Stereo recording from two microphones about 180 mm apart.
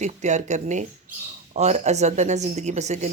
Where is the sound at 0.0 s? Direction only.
40° right (ahead or behind).